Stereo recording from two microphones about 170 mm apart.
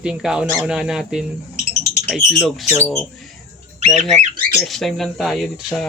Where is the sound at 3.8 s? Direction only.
45° right (ahead or behind).